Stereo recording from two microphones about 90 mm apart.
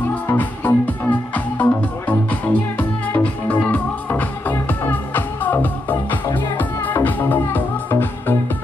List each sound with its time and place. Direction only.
0.3 s music: 20° left (ahead or behind)